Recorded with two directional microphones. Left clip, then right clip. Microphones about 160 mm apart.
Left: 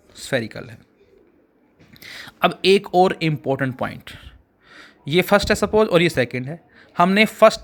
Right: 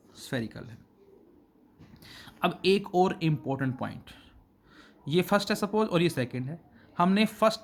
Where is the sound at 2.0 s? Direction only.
30° left (ahead or behind).